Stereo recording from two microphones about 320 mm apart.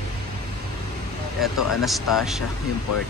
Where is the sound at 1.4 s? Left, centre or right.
Centre.